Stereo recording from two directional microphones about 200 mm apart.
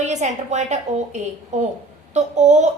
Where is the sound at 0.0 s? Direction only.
35° right (ahead or behind).